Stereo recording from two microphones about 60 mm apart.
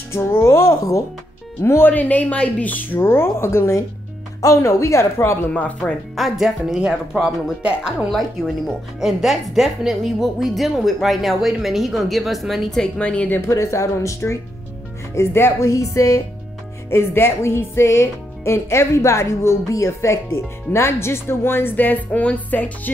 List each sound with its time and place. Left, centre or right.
0.1 s speech: left
1.9 s speech: left
3.0 s speech: left
4.4 s speech: left
5.5 s speech: left
6.1 s speech: centre
7.6 s speech: centre
8.1 s speech: centre
13.0 s speech: centre
13.5 s speech: left
15.1 s speech: left
15.6 s speech: left
16.9 s speech: left